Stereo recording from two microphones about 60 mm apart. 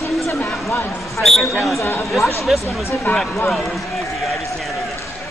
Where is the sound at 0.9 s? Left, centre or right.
Centre.